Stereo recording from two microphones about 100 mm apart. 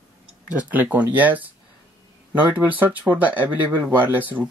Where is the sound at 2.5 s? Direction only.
15° right (ahead or behind).